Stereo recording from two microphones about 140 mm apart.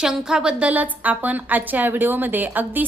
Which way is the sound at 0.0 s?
5° right (ahead or behind).